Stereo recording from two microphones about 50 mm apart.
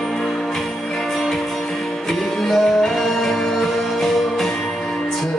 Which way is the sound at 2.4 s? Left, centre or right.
Centre.